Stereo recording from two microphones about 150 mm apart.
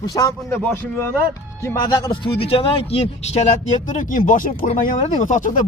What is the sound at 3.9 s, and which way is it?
Speech, 60° left (ahead or behind).